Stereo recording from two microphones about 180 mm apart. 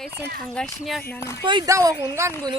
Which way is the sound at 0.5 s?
Centre (ahead or behind).